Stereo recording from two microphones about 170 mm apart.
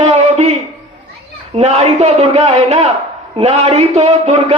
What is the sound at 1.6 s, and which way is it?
A man's voice, 45° right (ahead or behind).